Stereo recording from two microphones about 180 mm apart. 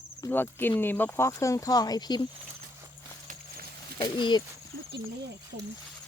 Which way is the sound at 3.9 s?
25° left (ahead or behind).